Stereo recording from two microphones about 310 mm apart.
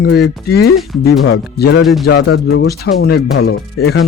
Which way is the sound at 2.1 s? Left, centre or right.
Left.